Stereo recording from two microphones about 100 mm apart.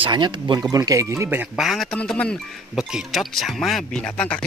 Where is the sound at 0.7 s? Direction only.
35° right (ahead or behind).